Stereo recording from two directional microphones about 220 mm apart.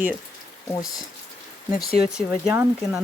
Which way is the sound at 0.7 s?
15° left (ahead or behind).